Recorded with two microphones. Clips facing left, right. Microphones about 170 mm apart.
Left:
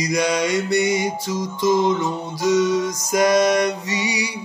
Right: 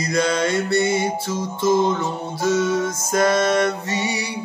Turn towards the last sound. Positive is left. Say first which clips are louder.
# even
turn(degrees=15)  # may be behind; listen again after turning